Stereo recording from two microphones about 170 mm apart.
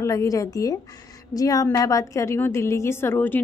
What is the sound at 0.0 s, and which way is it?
A woman's voice, 20° left (ahead or behind).